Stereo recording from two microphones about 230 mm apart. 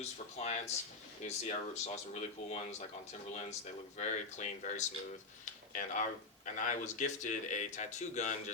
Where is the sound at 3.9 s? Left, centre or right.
Left.